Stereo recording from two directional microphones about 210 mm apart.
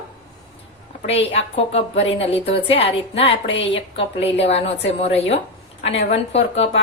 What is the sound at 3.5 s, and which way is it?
Speech, 60° left (ahead or behind).